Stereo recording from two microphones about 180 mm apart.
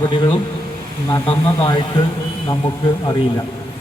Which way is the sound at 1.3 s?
30° left (ahead or behind).